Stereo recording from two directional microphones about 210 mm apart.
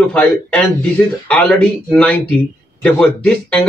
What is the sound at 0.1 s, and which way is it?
Speech, 5° left (ahead or behind).